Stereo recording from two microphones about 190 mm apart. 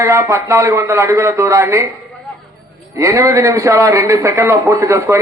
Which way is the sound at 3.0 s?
15° right (ahead or behind).